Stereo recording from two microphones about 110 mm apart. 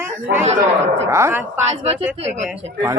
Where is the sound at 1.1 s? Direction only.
25° right (ahead or behind).